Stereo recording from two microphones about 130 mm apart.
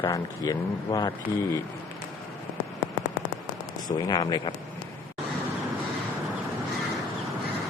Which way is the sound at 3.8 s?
30° left (ahead or behind).